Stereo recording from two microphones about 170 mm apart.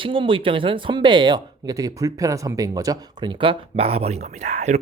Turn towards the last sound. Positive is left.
turn(degrees=-40)  # may be behind; listen again after turning